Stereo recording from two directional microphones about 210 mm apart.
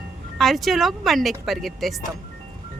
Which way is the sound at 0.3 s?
Centre (ahead or behind).